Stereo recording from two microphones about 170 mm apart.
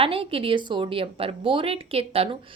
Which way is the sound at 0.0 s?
30° right (ahead or behind).